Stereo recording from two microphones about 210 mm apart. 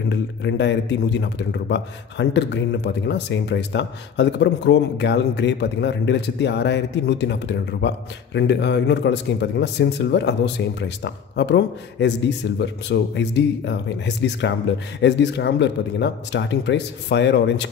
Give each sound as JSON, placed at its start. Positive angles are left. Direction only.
{"t": 0.1, "sound": "a man's voice", "side_deg": 55}